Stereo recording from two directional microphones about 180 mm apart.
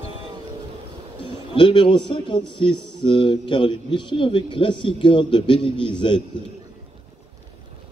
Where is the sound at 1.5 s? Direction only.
25° left (ahead or behind).